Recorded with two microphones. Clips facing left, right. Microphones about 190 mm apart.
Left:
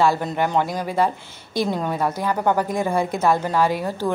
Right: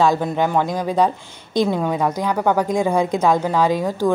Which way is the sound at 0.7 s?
15° right (ahead or behind).